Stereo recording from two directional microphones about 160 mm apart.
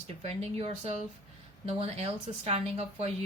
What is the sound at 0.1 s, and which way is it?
Speech, 40° right (ahead or behind).